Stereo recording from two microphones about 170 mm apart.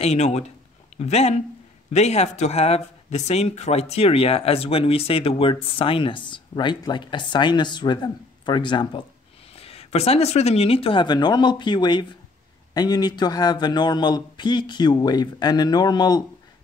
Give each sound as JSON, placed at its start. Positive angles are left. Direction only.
{"t": 0.0, "sound": "a man's voice", "side_deg": 40}